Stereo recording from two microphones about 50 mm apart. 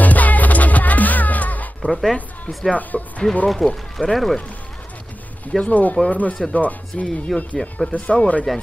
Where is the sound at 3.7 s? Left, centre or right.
Centre.